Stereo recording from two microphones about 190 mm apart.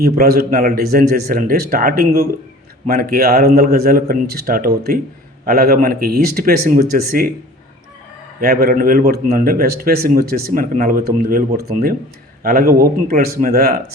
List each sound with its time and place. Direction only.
0.0 s a man's voice: 55° right (ahead or behind)
8.4 s a man's voice: 55° right (ahead or behind)